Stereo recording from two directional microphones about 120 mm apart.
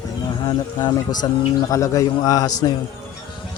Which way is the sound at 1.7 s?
30° left (ahead or behind).